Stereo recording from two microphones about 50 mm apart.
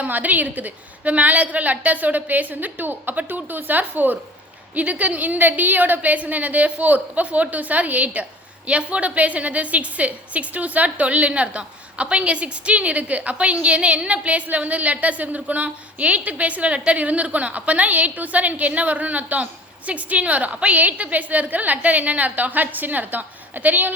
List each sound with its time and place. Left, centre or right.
0.0 s a woman's voice: right